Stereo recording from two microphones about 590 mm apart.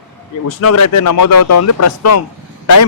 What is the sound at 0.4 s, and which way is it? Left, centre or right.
Speech, left.